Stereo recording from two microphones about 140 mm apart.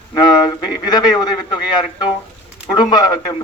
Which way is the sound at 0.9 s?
30° left (ahead or behind).